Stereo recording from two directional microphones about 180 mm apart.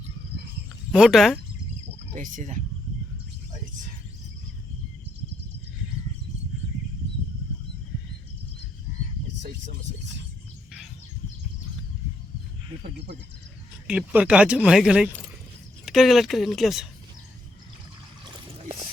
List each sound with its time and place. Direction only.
0.9 s speech: centre (ahead or behind)
2.1 s speech: 45° right (ahead or behind)
13.8 s speech: 5° right (ahead or behind)